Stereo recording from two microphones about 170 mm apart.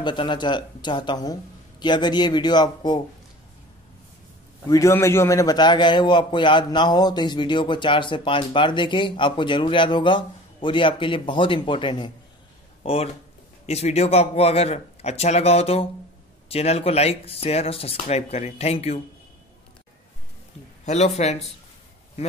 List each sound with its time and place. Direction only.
0.0 s a man's voice: 25° left (ahead or behind)
4.6 s a man's voice: 15° left (ahead or behind); by 18.9 s 35° left (ahead or behind)
20.8 s speech: 40° left (ahead or behind)